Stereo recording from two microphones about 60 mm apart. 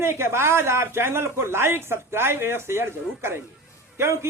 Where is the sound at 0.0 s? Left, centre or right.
Right.